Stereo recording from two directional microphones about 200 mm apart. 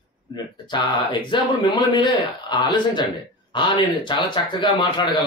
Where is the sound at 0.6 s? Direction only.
25° left (ahead or behind).